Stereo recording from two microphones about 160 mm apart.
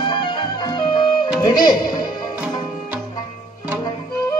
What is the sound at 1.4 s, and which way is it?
Speech, 25° left (ahead or behind).